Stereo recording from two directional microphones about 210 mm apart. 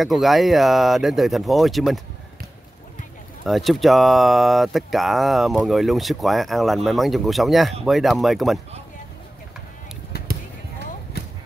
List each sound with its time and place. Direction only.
0.0 s speech: centre (ahead or behind)
3.4 s speech: centre (ahead or behind)
10.1 s basketball bounce: 50° left (ahead or behind)